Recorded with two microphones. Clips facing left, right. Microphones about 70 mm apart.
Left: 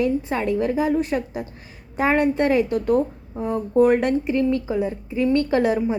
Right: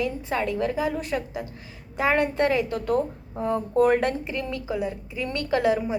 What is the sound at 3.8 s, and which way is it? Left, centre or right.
A woman's voice, centre.